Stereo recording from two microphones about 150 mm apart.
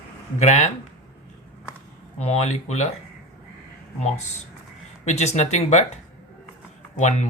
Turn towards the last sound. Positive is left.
turn(degrees=55)  # may be behind; listen again after turning